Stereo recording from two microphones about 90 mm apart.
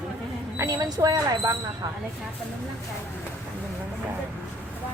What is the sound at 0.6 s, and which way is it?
Speech, 45° right (ahead or behind).